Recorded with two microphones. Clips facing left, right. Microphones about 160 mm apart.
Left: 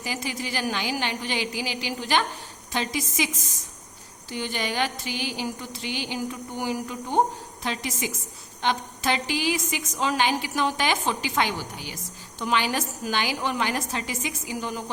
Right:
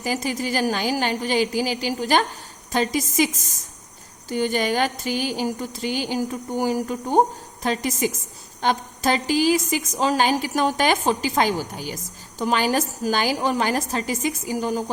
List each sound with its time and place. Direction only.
0.0 s speech: 45° right (ahead or behind)
4.3 s a woman's voice: 45° right (ahead or behind)